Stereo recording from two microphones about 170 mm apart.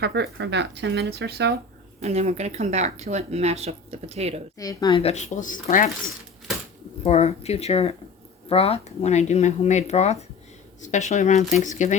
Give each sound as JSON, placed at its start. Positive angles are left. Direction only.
{"t": 0.0, "sound": "speech", "side_deg": -85}
{"t": 2.0, "sound": "speech", "side_deg": -40}
{"t": 4.5, "sound": "speech", "side_deg": 20}
{"t": 4.9, "sound": "speech", "side_deg": 40}
{"t": 7.0, "sound": "speech", "side_deg": 40}